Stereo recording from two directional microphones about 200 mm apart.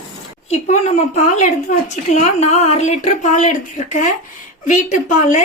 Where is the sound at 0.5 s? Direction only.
35° left (ahead or behind).